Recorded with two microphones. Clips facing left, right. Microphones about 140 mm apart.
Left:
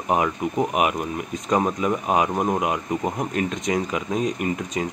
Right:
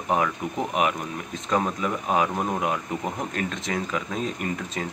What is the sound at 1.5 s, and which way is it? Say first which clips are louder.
Speech: left 3 dB; 15° left (ahead or behind).